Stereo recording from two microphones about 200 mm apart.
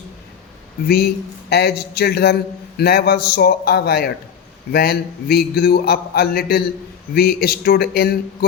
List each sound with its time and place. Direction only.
0.9 s a man's voice: 50° left (ahead or behind)